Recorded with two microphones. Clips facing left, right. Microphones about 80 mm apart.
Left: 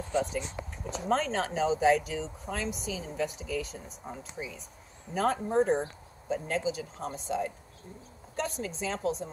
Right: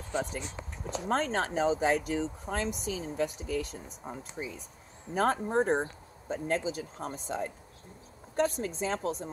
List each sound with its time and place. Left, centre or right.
0.1 s speech: right
5.1 s speech: right
8.5 s speech: right